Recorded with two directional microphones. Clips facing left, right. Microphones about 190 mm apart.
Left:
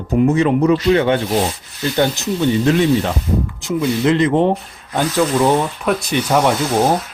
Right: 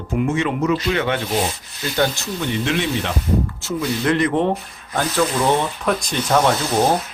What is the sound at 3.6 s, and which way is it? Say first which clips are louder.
Speech: left 8 dB; 25° left (ahead or behind).